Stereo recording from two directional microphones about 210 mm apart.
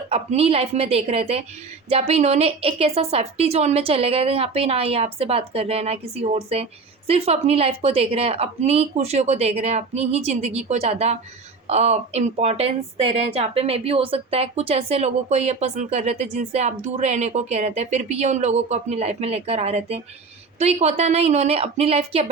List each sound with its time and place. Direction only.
0.1 s a woman's voice: 30° right (ahead or behind)